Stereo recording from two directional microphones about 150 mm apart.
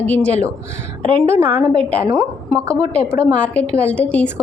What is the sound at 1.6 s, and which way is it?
Speech, 10° left (ahead or behind).